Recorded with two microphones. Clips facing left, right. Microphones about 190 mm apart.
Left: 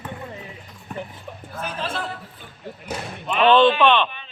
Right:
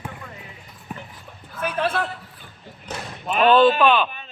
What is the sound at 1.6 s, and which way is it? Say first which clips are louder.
Speech: right 6 dB; 60° right (ahead or behind).